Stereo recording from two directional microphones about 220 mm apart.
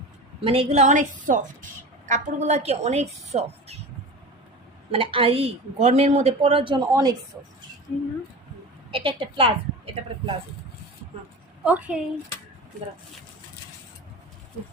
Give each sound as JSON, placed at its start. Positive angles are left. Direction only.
{"t": 0.4, "sound": "a woman's voice", "side_deg": -25}
{"t": 4.9, "sound": "a woman's voice", "side_deg": -25}
{"t": 8.9, "sound": "a woman's voice", "side_deg": -25}
{"t": 11.6, "sound": "a woman's voice", "side_deg": -5}